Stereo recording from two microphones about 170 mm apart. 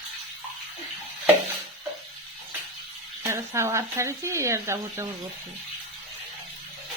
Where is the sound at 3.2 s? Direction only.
15° right (ahead or behind).